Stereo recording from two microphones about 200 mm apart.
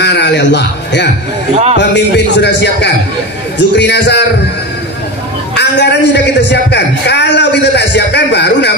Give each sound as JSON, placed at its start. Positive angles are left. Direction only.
{"t": 0.0, "sound": "a sound", "side_deg": 60}
{"t": 1.8, "sound": "a man's voice", "side_deg": 60}
{"t": 5.6, "sound": "a man's voice", "side_deg": 60}